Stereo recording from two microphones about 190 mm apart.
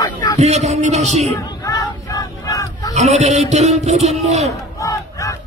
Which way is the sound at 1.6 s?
20° left (ahead or behind).